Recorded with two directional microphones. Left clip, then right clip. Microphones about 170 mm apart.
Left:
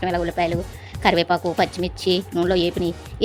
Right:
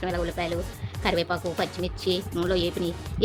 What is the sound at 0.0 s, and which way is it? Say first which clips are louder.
Speech: left 7 dB; 35° left (ahead or behind).